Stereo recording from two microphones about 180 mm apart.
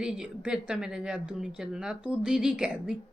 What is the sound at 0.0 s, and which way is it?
A woman's voice, 5° right (ahead or behind).